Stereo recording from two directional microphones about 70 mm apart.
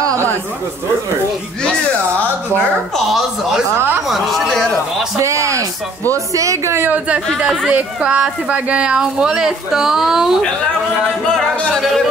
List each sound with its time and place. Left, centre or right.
3.1 s music: centre
5.2 s speech: right
7.3 s speech: centre
11.3 s music: centre